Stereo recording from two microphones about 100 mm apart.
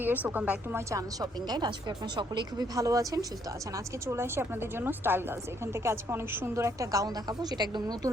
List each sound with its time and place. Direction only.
0.0 s a woman's voice: 15° right (ahead or behind)
0.9 s a woman's voice: 35° right (ahead or behind)